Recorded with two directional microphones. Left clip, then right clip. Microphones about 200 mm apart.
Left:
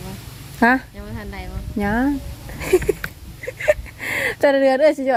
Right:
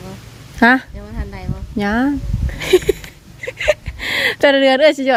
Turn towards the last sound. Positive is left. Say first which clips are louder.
# right 3 dB
turn(degrees=-25)  # may be behind; listen again after turning